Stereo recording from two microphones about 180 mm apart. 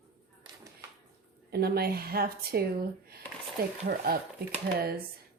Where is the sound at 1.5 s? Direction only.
60° right (ahead or behind).